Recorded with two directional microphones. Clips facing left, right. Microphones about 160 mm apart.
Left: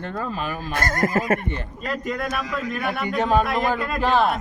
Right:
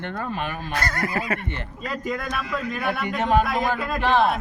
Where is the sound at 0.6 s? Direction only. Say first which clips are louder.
Left 3 dB; 45° left (ahead or behind).